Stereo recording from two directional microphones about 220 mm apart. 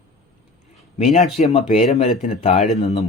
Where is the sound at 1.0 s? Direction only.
30° left (ahead or behind).